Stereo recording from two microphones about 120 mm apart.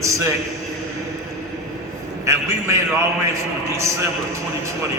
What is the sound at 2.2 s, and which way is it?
Speech, 25° right (ahead or behind).